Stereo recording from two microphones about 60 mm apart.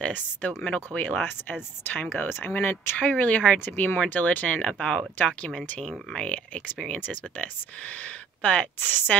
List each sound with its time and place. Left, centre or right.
0.0 s speech: left
3.0 s speech: left
4.6 s speech: centre
6.2 s speech: left